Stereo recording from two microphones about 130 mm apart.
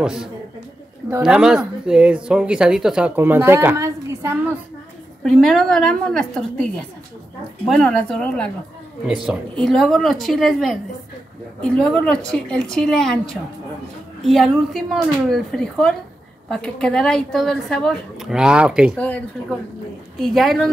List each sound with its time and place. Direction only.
0.0 s a woman's voice: 5° right (ahead or behind)
3.2 s speech: 15° right (ahead or behind)
5.2 s a woman's voice: centre (ahead or behind)
9.0 s a woman's voice: 5° right (ahead or behind)
18.9 s a woman's voice: 10° left (ahead or behind)